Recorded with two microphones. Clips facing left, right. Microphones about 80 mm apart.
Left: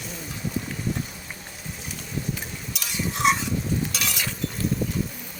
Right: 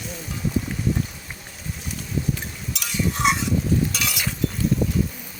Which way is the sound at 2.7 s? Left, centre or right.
Centre.